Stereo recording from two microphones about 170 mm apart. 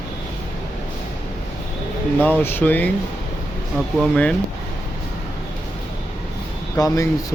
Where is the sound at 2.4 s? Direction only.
10° left (ahead or behind).